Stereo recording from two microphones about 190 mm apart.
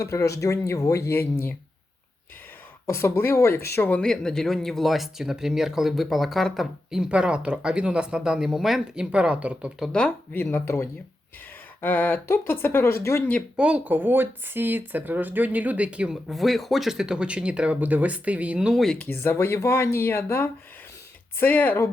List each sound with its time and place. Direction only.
0.0 s speech: 15° left (ahead or behind)
2.8 s speech: 15° left (ahead or behind)
13.6 s speech: 5° right (ahead or behind)
19.0 s speech: 10° left (ahead or behind)